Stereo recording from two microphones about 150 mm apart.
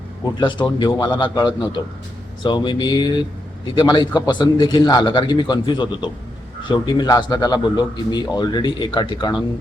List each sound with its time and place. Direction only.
0.3 s a man's voice: 30° left (ahead or behind)